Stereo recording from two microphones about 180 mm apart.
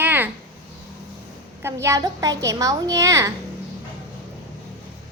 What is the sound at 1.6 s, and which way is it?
A child's voice, 15° right (ahead or behind).